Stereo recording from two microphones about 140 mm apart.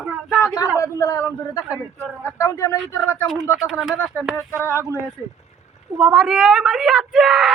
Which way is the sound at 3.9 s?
15° left (ahead or behind).